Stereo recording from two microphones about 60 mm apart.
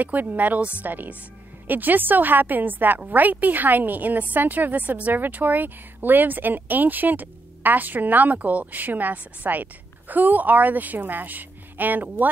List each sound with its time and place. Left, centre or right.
0.0 s a woman's voice: right